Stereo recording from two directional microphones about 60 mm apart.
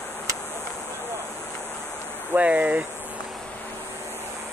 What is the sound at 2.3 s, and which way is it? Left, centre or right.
Speech, right.